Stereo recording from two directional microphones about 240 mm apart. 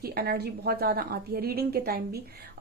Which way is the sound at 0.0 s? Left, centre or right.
Right.